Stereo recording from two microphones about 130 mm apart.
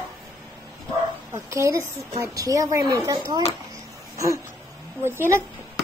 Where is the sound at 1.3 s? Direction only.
20° right (ahead or behind).